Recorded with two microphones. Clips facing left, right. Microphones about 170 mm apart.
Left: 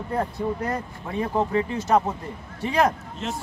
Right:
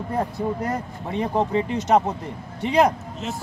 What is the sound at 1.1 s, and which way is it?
Speech, 20° right (ahead or behind).